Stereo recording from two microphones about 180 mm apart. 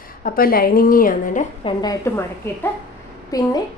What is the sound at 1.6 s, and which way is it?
Speech, 20° left (ahead or behind).